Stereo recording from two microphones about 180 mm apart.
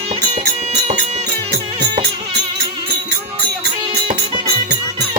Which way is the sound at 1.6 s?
25° right (ahead or behind).